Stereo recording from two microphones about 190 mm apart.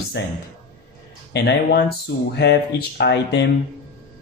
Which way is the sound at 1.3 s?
65° left (ahead or behind).